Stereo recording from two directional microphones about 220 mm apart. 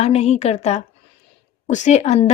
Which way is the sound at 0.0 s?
30° left (ahead or behind).